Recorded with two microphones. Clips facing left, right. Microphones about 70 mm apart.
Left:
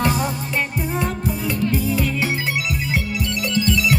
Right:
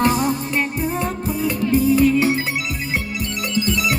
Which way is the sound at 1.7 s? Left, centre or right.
Right.